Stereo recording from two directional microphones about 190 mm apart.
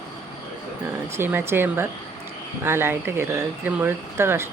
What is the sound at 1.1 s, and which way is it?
Speech, 10° right (ahead or behind).